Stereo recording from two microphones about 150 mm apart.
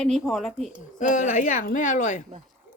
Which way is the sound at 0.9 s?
55° left (ahead or behind).